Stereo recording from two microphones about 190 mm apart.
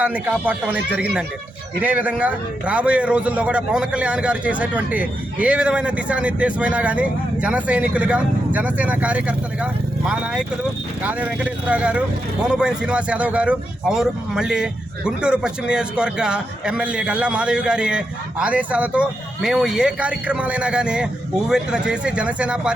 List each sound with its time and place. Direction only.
0.0 s a man's voice: 10° right (ahead or behind)
11.0 s speech: 10° right (ahead or behind)